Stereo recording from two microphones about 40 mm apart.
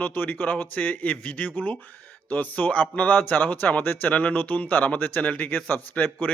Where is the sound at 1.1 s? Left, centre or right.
Left.